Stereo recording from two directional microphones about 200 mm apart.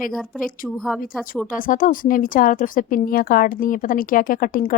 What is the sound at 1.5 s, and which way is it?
Speech, 45° left (ahead or behind).